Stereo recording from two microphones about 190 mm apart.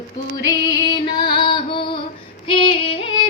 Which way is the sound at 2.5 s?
25° left (ahead or behind).